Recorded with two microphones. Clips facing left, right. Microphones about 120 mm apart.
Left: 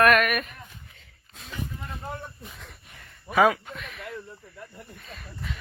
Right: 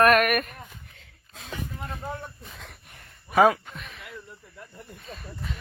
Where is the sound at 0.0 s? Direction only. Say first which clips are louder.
Right 1 dB; 40° right (ahead or behind).